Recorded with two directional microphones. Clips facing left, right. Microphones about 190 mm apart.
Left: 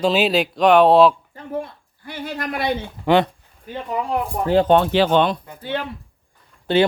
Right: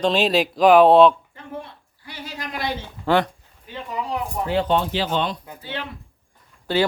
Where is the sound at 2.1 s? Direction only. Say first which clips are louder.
Left 6 dB; 55° left (ahead or behind).